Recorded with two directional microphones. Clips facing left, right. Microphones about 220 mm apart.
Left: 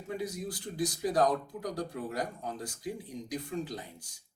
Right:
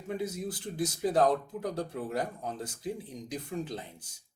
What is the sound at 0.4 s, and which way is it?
Speech, 25° right (ahead or behind).